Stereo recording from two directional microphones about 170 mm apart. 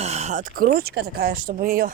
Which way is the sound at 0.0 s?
40° right (ahead or behind).